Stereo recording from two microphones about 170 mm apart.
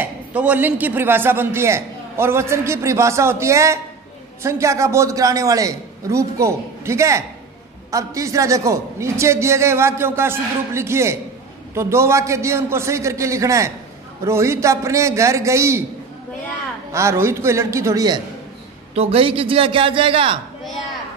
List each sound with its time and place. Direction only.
0.0 s a man's voice: 10° right (ahead or behind)
16.9 s a man's voice: 15° right (ahead or behind)
18.9 s a man's voice: 35° right (ahead or behind)